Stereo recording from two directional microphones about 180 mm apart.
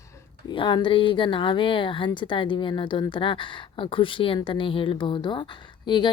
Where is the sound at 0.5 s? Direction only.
25° left (ahead or behind).